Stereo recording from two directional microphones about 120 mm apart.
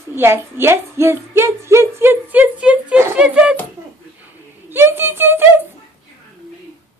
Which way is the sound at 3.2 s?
10° right (ahead or behind).